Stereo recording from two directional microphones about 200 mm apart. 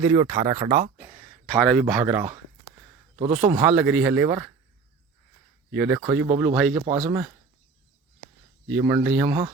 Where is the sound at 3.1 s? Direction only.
30° right (ahead or behind).